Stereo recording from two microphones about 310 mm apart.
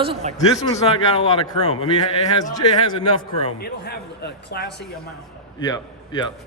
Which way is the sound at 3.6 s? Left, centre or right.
Left.